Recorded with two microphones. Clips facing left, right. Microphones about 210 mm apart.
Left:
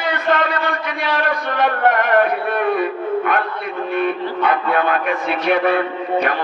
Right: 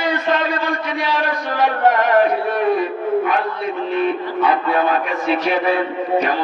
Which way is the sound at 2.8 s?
60° left (ahead or behind).